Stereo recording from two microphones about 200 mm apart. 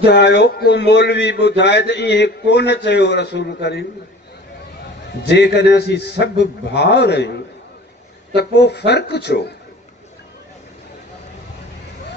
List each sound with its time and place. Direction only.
0.0 s a man's voice: 60° left (ahead or behind)
5.2 s a man's voice: 55° left (ahead or behind)
8.4 s a man's voice: 55° left (ahead or behind)